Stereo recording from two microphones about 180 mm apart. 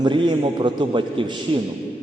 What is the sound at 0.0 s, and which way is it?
A man's voice, 25° right (ahead or behind).